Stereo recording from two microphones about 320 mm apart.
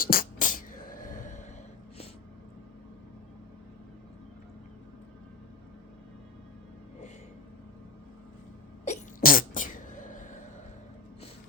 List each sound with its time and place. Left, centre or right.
0.0 s music: left
8.8 s sneeze: left